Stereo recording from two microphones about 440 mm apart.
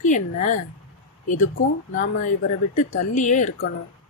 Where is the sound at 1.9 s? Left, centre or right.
Left.